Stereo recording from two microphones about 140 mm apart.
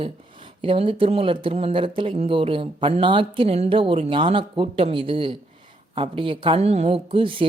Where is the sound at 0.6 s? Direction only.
40° right (ahead or behind).